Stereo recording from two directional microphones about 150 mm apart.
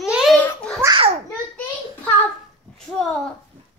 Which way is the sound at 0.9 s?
40° right (ahead or behind).